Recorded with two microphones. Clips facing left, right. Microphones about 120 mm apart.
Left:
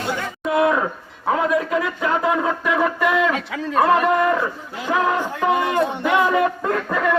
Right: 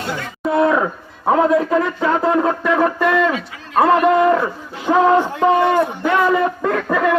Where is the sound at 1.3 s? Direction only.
35° right (ahead or behind).